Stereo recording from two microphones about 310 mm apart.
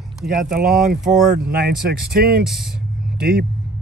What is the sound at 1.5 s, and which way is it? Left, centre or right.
Speech, right.